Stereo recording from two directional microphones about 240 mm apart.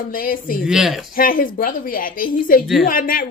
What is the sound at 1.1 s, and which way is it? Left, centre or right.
A woman's voice, left.